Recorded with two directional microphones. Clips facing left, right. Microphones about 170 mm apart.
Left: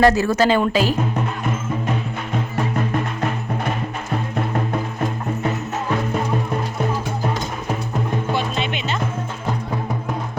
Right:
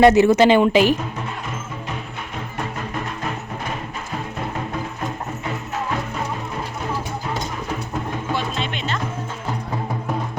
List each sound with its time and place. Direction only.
0.0 s speech: 20° right (ahead or behind)